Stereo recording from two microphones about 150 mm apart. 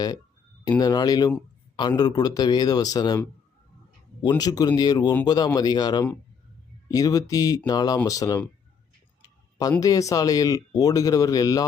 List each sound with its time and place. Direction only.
0.8 s speech: 25° left (ahead or behind)
4.2 s speech: 30° left (ahead or behind)
9.2 s a sound: 25° left (ahead or behind)
9.8 s speech: 20° left (ahead or behind)